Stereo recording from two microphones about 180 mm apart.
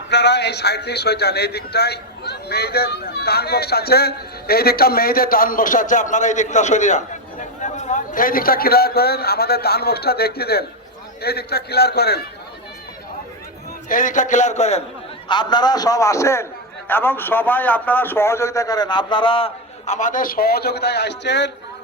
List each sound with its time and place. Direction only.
0.1 s a man's voice: 70° left (ahead or behind)
13.8 s speech: 45° left (ahead or behind)
15.3 s a man's voice: 25° left (ahead or behind)
19.9 s a man's voice: 45° left (ahead or behind); by 21.5 s 75° left (ahead or behind)